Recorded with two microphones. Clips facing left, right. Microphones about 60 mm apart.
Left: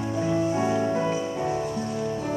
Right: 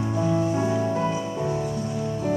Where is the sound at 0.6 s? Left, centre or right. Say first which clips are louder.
Even; centre.